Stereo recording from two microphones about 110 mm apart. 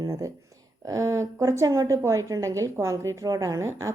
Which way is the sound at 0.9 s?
30° right (ahead or behind).